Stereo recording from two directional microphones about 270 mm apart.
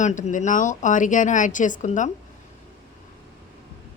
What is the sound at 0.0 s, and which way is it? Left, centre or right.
Speech, left.